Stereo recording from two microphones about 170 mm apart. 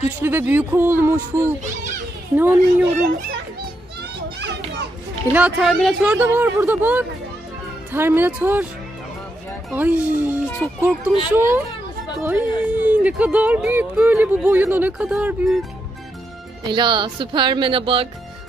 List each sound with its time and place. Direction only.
0.2 s speech: 10° right (ahead or behind)
4.4 s children playing: 90° right
5.3 s speech: 5° right (ahead or behind)
6.0 s speech: 10° right (ahead or behind)
9.7 s speech: 10° right (ahead or behind)
16.7 s speech: 25° right (ahead or behind)